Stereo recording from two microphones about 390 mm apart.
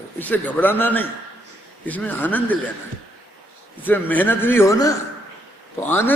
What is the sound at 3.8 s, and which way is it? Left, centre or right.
A man's voice, centre.